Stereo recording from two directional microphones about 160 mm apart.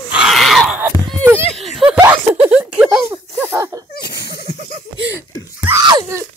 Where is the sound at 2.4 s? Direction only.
10° right (ahead or behind).